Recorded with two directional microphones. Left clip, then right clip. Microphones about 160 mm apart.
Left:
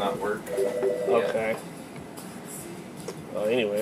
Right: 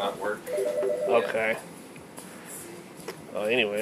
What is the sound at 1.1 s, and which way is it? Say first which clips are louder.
Speech: even; 10° right (ahead or behind).